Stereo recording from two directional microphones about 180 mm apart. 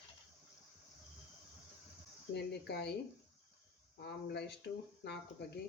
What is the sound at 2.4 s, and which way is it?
Speech, 65° left (ahead or behind).